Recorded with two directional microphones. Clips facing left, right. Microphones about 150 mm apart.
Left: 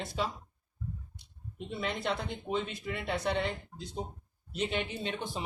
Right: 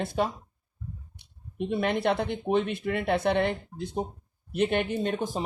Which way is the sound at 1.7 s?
60° right (ahead or behind).